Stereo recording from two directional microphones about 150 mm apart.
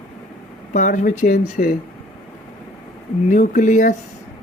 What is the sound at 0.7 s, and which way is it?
Speech, 60° left (ahead or behind).